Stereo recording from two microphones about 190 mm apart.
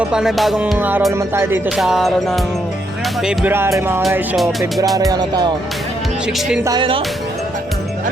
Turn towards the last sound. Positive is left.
turn(degrees=-25)  # may be behind; listen again after turning